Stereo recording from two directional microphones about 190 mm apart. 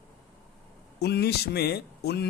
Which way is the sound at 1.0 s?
55° left (ahead or behind).